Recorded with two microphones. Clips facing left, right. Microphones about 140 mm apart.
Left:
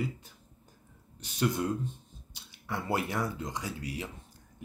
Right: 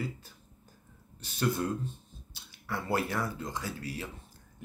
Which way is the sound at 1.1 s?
15° left (ahead or behind).